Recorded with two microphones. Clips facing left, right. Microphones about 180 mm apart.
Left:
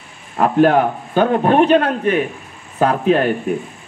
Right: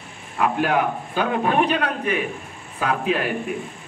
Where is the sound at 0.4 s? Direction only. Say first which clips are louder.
Left 8 dB; 40° left (ahead or behind).